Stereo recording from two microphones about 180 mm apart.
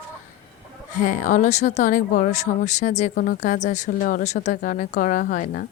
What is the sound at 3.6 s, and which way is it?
Speech, 40° left (ahead or behind).